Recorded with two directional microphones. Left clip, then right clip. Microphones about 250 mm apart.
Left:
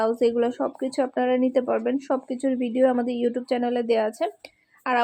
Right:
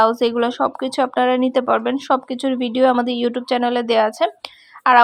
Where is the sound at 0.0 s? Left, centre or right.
Centre.